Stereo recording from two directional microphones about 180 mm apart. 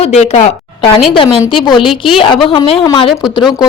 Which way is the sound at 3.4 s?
Centre (ahead or behind).